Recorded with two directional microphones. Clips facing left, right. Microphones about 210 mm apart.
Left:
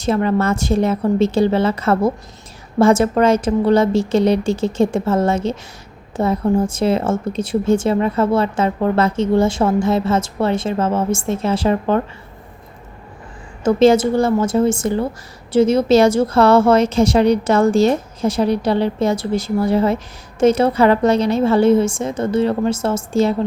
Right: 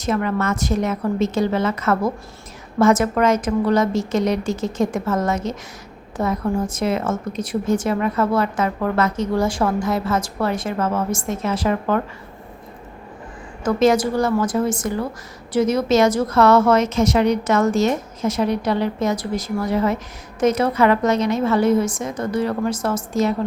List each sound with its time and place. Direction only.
0.0 s a woman's voice: 30° left (ahead or behind)
13.7 s a woman's voice: 25° left (ahead or behind)